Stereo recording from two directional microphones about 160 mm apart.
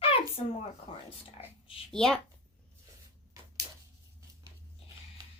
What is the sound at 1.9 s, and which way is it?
Speech, 5° left (ahead or behind).